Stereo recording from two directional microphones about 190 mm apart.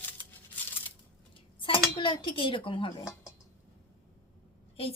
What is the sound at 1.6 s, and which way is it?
Speech, 25° left (ahead or behind).